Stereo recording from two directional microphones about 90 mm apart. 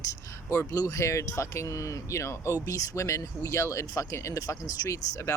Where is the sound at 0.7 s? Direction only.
35° left (ahead or behind).